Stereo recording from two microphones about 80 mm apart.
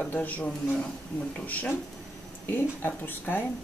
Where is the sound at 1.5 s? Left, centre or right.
Left.